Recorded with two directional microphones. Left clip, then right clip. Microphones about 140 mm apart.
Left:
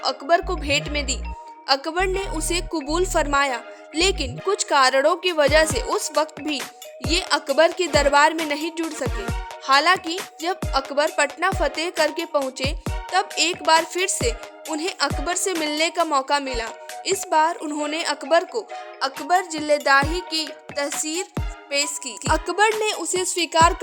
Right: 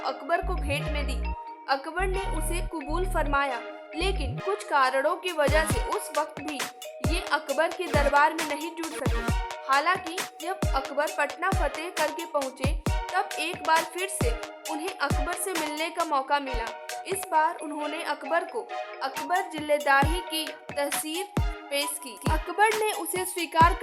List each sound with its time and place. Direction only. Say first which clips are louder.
0.0 s a woman's voice: left 8 dB; 45° left (ahead or behind)
19.3 s music: left 6 dB; 40° left (ahead or behind)
22.3 s music: left 5 dB; 35° left (ahead or behind)